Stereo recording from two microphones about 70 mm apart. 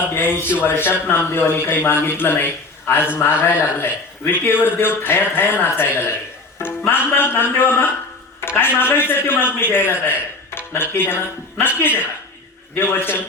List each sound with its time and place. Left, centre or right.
0.0 s a man's voice: left